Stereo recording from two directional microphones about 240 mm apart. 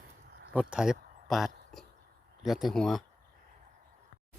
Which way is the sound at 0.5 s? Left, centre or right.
Centre.